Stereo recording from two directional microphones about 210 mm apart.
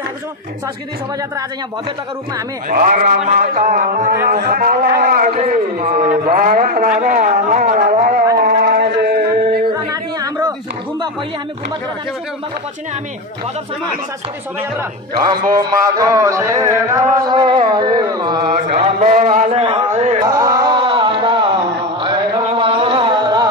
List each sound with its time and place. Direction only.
2.7 s a man's voice: 40° right (ahead or behind)
8.4 s music: 45° right (ahead or behind)
14.8 s music: 20° right (ahead or behind)
18.7 s a sound: 35° right (ahead or behind)
20.2 s music: 15° right (ahead or behind)